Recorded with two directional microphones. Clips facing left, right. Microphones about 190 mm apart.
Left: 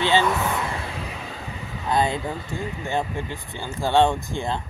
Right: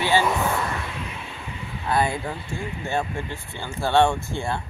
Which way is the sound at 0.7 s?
30° left (ahead or behind).